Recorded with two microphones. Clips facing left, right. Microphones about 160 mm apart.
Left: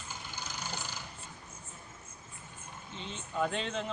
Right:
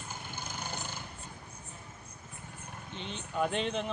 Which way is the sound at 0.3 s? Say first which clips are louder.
Right 1 dB; 55° right (ahead or behind).